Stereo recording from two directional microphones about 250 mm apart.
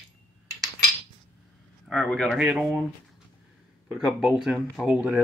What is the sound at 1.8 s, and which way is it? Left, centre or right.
Speech, centre.